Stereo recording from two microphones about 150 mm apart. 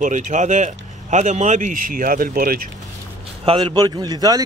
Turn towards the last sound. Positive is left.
turn(degrees=-25)  # may be behind; listen again after turning